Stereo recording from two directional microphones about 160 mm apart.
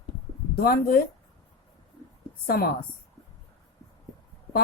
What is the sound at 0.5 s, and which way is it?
Speech, 70° left (ahead or behind).